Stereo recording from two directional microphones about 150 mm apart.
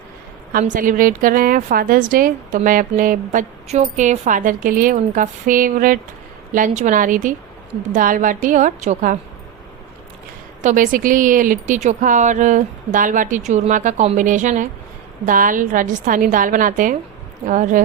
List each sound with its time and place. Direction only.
0.7 s a woman's voice: 60° right (ahead or behind)
3.7 s a woman's voice: 50° right (ahead or behind)
10.6 s a woman's voice: 60° right (ahead or behind)